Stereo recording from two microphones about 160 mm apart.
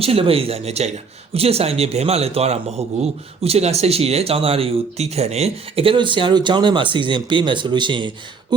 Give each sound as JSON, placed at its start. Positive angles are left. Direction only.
{"t": 0.0, "sound": "a man's voice", "side_deg": -35}